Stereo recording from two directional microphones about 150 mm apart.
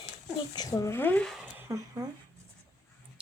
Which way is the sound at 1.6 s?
20° right (ahead or behind).